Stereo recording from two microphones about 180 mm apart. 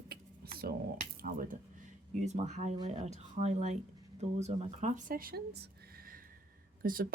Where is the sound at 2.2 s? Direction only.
40° right (ahead or behind); by 5.7 s 60° right (ahead or behind).